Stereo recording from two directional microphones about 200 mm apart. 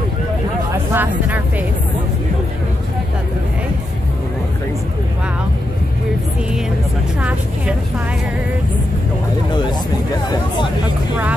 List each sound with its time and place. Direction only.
0.9 s speech: 10° right (ahead or behind)
7.2 s vehicle: 5° right (ahead or behind)